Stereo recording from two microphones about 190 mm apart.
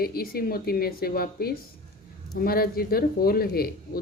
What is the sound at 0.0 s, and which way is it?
Speech, 50° left (ahead or behind).